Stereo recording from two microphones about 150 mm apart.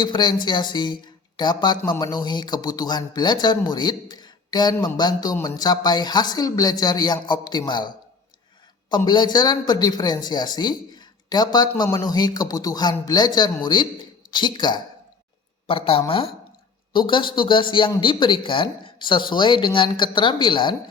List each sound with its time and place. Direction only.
0.0 s speech: 30° left (ahead or behind)
9.0 s speech: 30° left (ahead or behind)